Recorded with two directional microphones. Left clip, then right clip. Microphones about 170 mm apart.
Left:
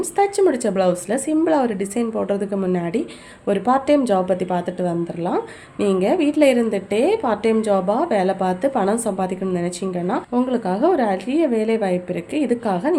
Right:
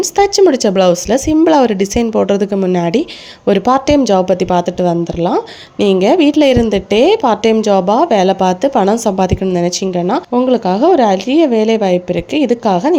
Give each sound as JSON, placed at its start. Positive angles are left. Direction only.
{"t": 0.0, "sound": "a woman's voice", "side_deg": -45}